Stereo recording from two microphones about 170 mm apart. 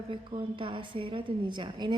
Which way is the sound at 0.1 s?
30° right (ahead or behind).